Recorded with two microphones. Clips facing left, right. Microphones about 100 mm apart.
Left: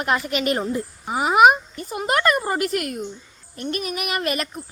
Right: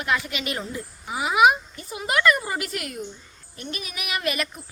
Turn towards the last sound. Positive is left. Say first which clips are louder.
# left 3 dB
turn(degrees=45)  # may be behind; listen again after turning